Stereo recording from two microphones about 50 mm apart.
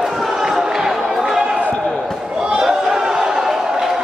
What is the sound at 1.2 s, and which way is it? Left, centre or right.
Basketball bounce, centre.